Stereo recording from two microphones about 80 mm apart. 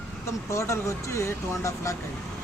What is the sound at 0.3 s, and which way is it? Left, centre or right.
Speech, left.